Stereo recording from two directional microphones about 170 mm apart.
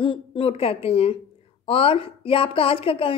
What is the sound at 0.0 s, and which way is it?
A woman's voice, 30° left (ahead or behind).